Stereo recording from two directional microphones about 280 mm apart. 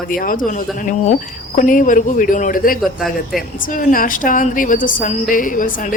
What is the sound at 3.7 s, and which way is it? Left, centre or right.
Speech, left.